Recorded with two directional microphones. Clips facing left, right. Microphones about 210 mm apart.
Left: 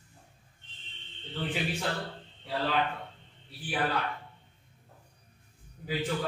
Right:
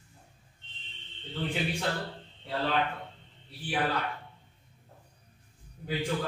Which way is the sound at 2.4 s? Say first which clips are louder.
Even; centre (ahead or behind).